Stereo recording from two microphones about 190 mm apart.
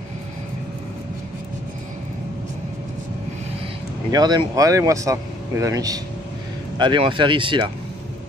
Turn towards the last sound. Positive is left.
turn(degrees=-25)  # may be behind; listen again after turning